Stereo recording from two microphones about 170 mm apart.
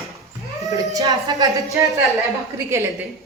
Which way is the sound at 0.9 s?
20° right (ahead or behind).